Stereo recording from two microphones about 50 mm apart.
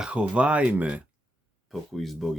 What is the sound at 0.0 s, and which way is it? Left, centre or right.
Speech, right.